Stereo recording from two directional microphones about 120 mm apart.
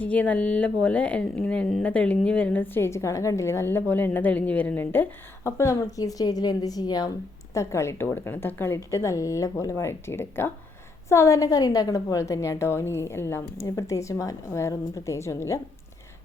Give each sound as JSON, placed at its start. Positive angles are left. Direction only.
{"t": 0.0, "sound": "a woman's voice", "side_deg": 10}